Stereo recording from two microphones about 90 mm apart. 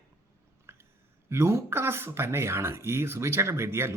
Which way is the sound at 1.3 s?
30° right (ahead or behind).